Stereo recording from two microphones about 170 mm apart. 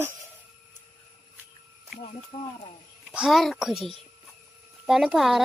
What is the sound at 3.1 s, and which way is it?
A child's voice, 5° right (ahead or behind).